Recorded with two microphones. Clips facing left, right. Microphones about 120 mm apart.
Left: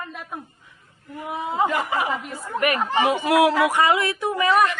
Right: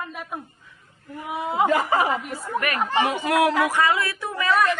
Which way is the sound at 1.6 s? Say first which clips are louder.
Right 5 dB; 40° right (ahead or behind).